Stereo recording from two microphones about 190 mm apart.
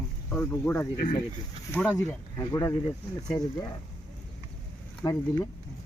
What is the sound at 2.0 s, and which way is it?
Speech, 15° left (ahead or behind).